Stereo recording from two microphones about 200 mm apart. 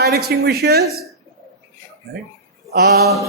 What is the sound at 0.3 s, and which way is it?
Speech, 50° right (ahead or behind).